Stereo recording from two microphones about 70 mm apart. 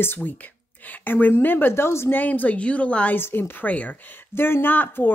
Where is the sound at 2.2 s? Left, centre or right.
Left.